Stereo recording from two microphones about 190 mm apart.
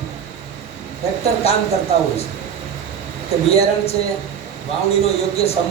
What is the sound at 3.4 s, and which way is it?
A man's voice, 35° left (ahead or behind).